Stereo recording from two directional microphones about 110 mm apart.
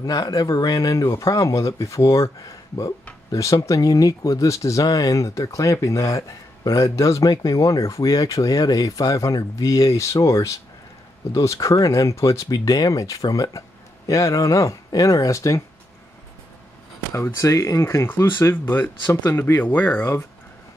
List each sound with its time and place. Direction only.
0.0 s speech: 35° left (ahead or behind)
17.1 s speech: 25° left (ahead or behind)